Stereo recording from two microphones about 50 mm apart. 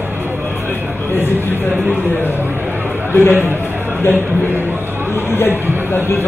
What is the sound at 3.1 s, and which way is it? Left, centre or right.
Speech, left.